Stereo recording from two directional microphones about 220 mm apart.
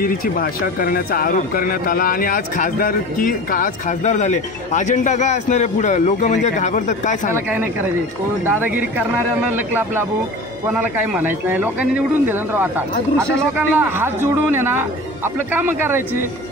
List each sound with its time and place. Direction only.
0.0 s speech: 40° left (ahead or behind)
8.5 s a man's voice: 10° right (ahead or behind)
10.7 s a man's voice: 10° right (ahead or behind)